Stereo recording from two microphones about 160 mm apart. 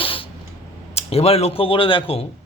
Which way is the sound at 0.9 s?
40° left (ahead or behind).